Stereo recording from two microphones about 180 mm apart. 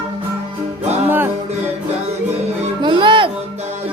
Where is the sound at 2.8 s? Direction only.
25° right (ahead or behind).